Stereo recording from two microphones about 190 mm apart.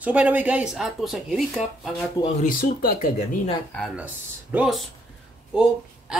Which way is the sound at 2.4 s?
45° left (ahead or behind).